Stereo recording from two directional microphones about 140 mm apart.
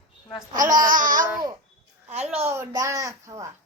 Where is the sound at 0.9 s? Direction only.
75° right (ahead or behind).